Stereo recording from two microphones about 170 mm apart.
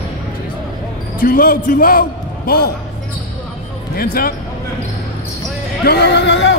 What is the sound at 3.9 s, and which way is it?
Speech, 60° left (ahead or behind).